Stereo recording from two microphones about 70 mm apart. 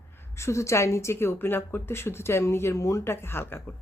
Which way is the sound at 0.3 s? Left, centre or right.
Left.